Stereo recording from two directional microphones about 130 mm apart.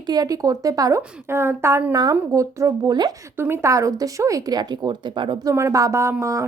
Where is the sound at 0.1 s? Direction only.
30° right (ahead or behind).